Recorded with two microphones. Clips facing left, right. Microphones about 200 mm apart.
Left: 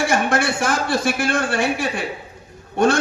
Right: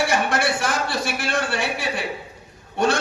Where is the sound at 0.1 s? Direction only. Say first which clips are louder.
Left 2 dB; 50° left (ahead or behind).